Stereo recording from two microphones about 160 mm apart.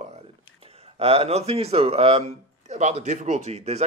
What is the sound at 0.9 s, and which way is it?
A man's voice, 40° right (ahead or behind).